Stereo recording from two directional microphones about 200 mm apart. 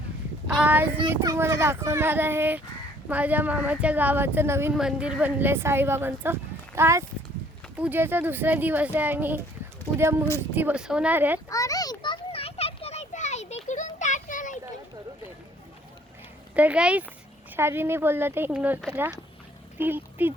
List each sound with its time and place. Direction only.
0.4 s child singing: 10° right (ahead or behind)
1.1 s a woman's voice: 15° right (ahead or behind)
11.4 s a sound: 15° left (ahead or behind); by 14.6 s 40° left (ahead or behind)
16.6 s a woman's voice: 5° right (ahead or behind)